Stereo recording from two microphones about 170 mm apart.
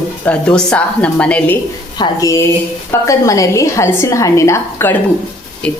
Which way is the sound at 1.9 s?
20° left (ahead or behind).